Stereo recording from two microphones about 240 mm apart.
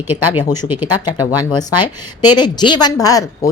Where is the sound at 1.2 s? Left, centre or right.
Centre.